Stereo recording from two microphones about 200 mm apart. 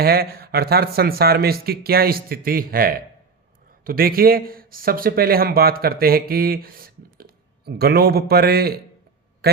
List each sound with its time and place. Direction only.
0.0 s a man's voice: 50° right (ahead or behind)